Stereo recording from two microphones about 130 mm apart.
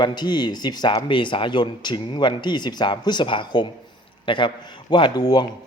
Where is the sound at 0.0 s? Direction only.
35° left (ahead or behind).